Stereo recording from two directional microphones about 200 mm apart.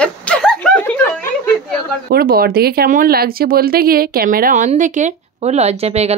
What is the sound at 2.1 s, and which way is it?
Speech, 50° right (ahead or behind).